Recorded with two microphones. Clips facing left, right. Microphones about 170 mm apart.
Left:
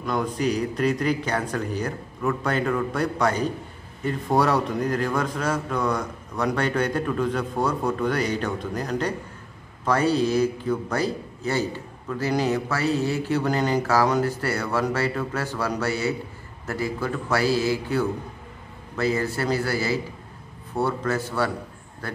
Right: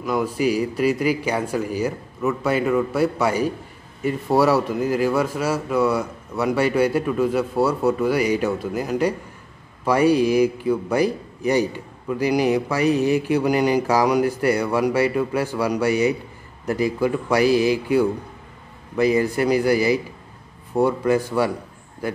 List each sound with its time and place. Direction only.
0.0 s a man's voice: 5° right (ahead or behind)